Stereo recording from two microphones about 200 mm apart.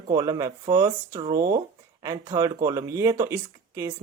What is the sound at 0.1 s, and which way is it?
Speech, 20° right (ahead or behind).